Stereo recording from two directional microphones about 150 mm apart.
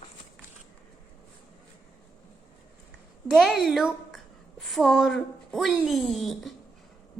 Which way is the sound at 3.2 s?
Centre (ahead or behind).